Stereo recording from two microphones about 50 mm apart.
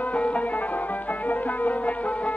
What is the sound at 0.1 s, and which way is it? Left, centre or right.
Music, left.